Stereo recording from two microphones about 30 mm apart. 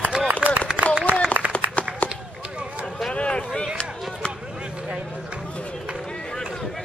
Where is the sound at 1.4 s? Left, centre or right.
Right.